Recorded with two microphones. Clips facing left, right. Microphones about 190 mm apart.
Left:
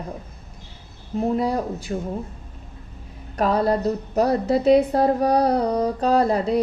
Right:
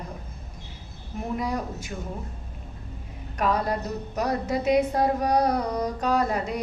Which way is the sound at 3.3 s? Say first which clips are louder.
Left 5 dB; 30° left (ahead or behind).